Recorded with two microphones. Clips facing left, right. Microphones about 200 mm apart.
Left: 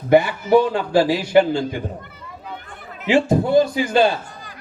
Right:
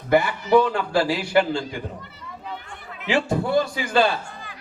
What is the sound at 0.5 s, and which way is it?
Speech, 20° left (ahead or behind).